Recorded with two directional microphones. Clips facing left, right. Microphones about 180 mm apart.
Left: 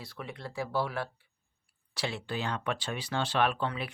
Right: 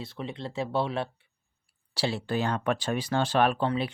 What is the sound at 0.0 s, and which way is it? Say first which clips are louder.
Speech: right 6 dB; 25° right (ahead or behind).